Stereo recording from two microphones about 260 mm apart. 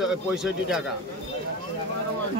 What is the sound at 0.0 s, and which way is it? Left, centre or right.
Speech, centre.